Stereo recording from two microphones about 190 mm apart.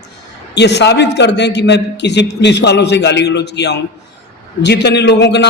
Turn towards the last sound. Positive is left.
turn(degrees=65)  # may be behind; listen again after turning